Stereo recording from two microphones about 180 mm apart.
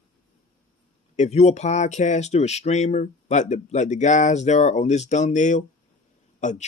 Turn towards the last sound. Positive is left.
turn(degrees=40)  # may be behind; listen again after turning